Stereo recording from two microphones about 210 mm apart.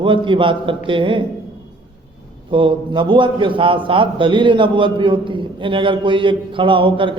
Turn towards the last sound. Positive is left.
turn(degrees=-25)  # may be behind; listen again after turning